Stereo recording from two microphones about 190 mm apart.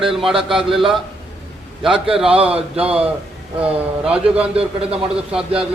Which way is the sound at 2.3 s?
30° right (ahead or behind).